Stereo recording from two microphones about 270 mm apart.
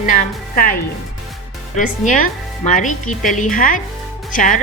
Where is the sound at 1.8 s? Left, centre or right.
Left.